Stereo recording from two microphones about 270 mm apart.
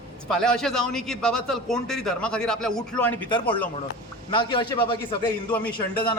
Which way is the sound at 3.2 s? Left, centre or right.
Centre.